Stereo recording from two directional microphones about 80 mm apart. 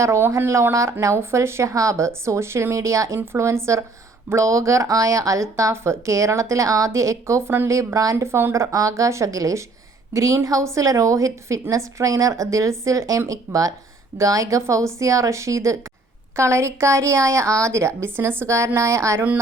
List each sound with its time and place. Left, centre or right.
0.0 s speech: right